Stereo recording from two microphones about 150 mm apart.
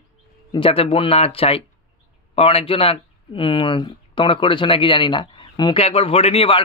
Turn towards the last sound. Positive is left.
turn(degrees=40)  # may be behind; listen again after turning